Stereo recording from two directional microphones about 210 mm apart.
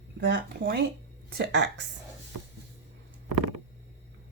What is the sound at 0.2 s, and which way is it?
Speech, 50° right (ahead or behind).